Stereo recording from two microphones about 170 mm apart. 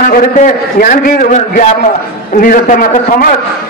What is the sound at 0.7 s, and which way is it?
A man's voice, 55° left (ahead or behind).